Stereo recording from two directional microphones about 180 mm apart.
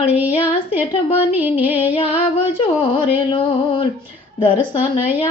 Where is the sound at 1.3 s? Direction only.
10° right (ahead or behind).